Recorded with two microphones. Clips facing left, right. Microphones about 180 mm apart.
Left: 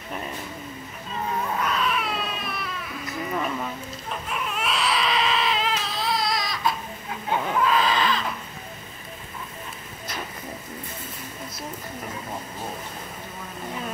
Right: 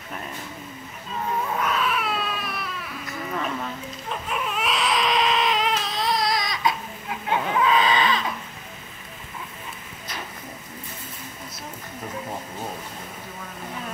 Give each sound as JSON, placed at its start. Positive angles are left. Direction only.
{"t": 1.6, "sound": "baby cry", "side_deg": 0}
{"t": 3.3, "sound": "a sound", "side_deg": 10}
{"t": 4.3, "sound": "baby cry", "side_deg": 0}